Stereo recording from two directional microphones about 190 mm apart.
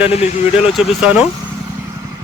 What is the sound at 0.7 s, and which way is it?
Speech, 5° right (ahead or behind).